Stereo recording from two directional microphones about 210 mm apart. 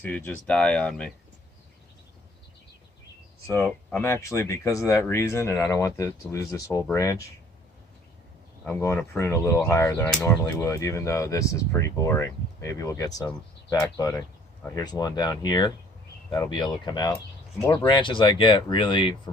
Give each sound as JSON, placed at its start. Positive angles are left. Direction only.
{"t": 0.0, "sound": "speech", "side_deg": 10}
{"t": 3.6, "sound": "speech", "side_deg": 10}
{"t": 8.6, "sound": "speech", "side_deg": 10}